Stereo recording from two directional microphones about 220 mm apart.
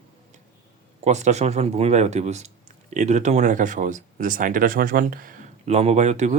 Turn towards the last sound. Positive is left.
turn(degrees=-30)  # may be behind; listen again after turning